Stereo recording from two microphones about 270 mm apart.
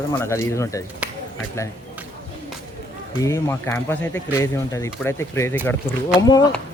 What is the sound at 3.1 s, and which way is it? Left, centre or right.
A man's voice, centre.